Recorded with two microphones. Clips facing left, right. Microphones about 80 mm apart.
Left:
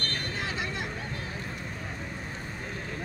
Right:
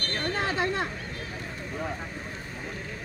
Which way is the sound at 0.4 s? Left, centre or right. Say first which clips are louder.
Right 8 dB; right.